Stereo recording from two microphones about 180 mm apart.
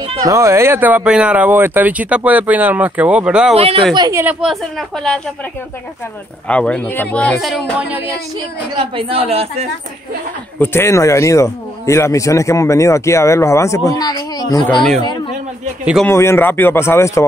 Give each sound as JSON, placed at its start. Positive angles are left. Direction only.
{"t": 0.2, "sound": "speech", "side_deg": -15}
{"t": 3.9, "sound": "a woman's voice", "side_deg": -20}
{"t": 6.4, "sound": "a man's voice", "side_deg": 5}
{"t": 8.7, "sound": "speech", "side_deg": -30}
{"t": 10.6, "sound": "a man's voice", "side_deg": 15}
{"t": 15.8, "sound": "a woman's voice", "side_deg": -5}
{"t": 16.1, "sound": "a man's voice", "side_deg": 15}